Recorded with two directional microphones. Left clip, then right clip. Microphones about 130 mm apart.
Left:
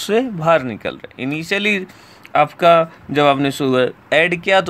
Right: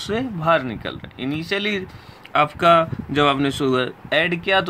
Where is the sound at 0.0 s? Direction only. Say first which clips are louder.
Left 6 dB; 45° left (ahead or behind).